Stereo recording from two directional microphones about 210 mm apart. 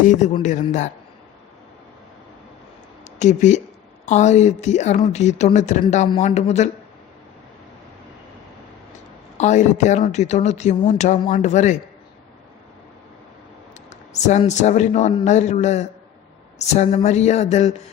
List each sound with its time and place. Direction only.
0.4 s speech: 35° left (ahead or behind)
3.2 s speech: 35° left (ahead or behind)
9.4 s speech: 35° left (ahead or behind)
13.9 s speech: 35° left (ahead or behind)